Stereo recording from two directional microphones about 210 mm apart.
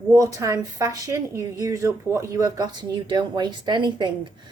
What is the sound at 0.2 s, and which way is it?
A woman's voice, 15° right (ahead or behind).